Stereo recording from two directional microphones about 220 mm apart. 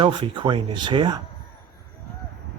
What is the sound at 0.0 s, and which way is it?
A man's voice, 20° right (ahead or behind).